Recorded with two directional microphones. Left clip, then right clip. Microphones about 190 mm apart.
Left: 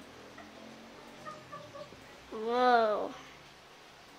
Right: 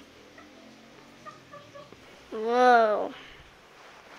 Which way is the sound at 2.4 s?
20° right (ahead or behind).